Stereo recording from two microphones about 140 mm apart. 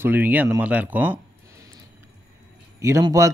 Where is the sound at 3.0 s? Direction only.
25° right (ahead or behind).